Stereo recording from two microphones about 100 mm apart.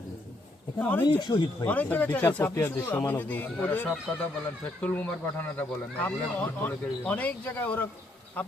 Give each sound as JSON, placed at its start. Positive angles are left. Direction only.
{"t": 0.8, "sound": "speech", "side_deg": 20}
{"t": 1.3, "sound": "speech", "side_deg": 40}
{"t": 1.6, "sound": "speech", "side_deg": 15}
{"t": 4.1, "sound": "speech", "side_deg": 5}
{"t": 4.8, "sound": "speech", "side_deg": 20}